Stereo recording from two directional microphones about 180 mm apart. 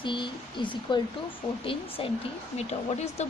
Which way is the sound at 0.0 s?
25° left (ahead or behind).